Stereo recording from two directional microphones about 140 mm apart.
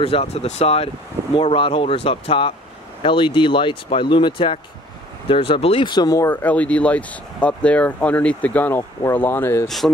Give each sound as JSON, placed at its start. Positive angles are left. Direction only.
{"t": 0.0, "sound": "speech", "side_deg": 45}
{"t": 5.3, "sound": "speech", "side_deg": 40}